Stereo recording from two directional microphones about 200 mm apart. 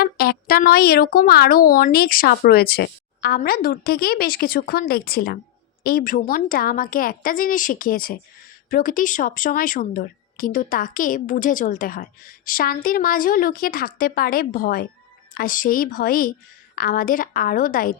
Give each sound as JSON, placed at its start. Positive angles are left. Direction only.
{"t": 0.0, "sound": "speech", "side_deg": 50}